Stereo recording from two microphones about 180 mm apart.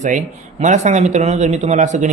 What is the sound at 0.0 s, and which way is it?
Speech, 40° right (ahead or behind).